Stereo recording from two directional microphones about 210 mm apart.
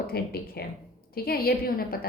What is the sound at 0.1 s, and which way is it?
A woman's voice, 45° left (ahead or behind).